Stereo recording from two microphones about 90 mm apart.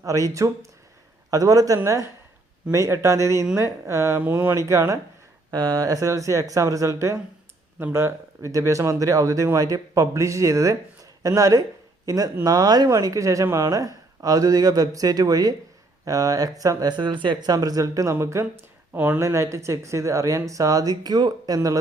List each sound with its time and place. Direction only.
0.0 s a man's voice: 40° right (ahead or behind)
5.5 s speech: 45° right (ahead or behind)
17.0 s speech: 60° right (ahead or behind)
17.5 s speech: 45° right (ahead or behind); by 19.2 s 20° right (ahead or behind)
19.2 s speech: 35° right (ahead or behind)